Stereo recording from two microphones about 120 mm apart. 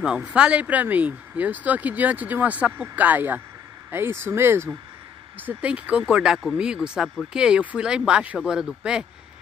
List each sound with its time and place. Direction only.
0.0 s speech: 10° right (ahead or behind)